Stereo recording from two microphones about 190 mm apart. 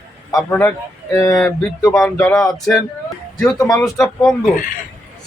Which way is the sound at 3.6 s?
15° left (ahead or behind).